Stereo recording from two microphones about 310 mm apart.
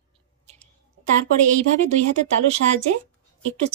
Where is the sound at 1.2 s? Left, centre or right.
Right.